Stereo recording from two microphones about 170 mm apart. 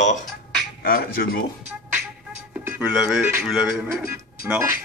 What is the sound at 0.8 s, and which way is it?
Speech, 60° left (ahead or behind).